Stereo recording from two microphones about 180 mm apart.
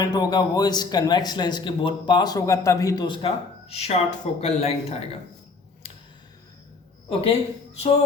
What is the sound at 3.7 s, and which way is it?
Speech, 35° left (ahead or behind).